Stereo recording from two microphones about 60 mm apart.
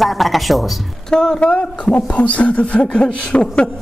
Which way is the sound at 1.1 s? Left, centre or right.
Centre.